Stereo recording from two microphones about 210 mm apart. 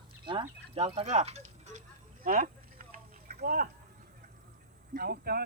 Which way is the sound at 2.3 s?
40° right (ahead or behind).